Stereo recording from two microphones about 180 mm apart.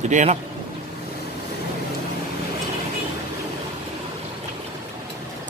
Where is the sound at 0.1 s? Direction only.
40° right (ahead or behind).